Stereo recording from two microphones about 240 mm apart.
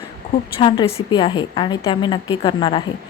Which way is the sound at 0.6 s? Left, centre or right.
Left.